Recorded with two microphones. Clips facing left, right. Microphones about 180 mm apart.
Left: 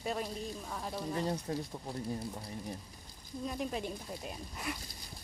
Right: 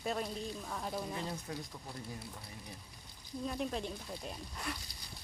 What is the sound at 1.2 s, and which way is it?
Speech, 35° left (ahead or behind).